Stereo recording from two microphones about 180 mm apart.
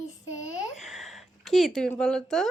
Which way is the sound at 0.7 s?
Centre (ahead or behind).